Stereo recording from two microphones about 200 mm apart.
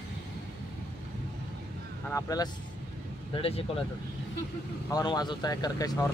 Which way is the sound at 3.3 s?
30° left (ahead or behind).